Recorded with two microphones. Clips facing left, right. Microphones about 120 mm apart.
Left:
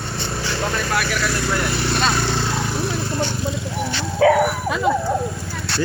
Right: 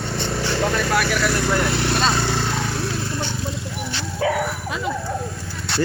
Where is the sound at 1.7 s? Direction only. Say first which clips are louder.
Right 1 dB; 20° right (ahead or behind).